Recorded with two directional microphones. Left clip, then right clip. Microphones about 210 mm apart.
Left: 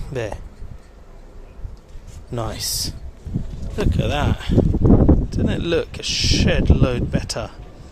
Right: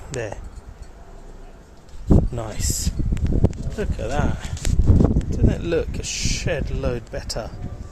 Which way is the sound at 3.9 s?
25° left (ahead or behind).